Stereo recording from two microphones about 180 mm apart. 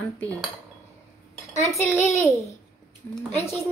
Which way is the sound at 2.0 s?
15° left (ahead or behind).